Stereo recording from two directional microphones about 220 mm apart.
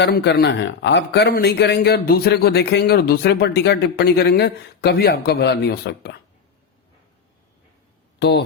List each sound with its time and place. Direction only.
0.0 s speech: 50° left (ahead or behind)
8.2 s speech: 50° left (ahead or behind)